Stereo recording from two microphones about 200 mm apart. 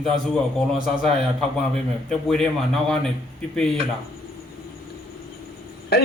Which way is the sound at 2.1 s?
5° left (ahead or behind).